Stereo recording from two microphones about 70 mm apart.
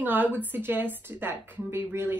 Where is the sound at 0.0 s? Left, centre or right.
Right.